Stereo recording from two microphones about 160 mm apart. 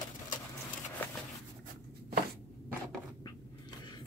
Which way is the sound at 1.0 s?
10° left (ahead or behind).